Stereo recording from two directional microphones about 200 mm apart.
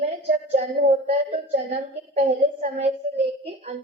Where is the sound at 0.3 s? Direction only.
35° right (ahead or behind).